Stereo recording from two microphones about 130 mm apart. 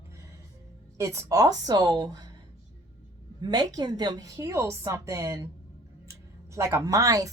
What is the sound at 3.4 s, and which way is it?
Speech, 30° right (ahead or behind).